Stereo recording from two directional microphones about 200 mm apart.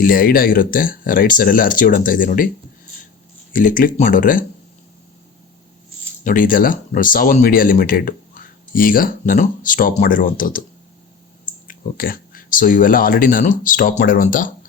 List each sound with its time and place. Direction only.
0.0 s speech: 45° left (ahead or behind)
3.5 s speech: 45° left (ahead or behind)
6.2 s speech: 40° left (ahead or behind)
11.7 s speech: 45° left (ahead or behind)